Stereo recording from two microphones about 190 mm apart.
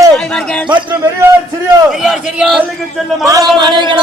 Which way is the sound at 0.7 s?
20° right (ahead or behind).